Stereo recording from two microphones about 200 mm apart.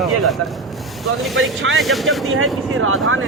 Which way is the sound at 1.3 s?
90° right.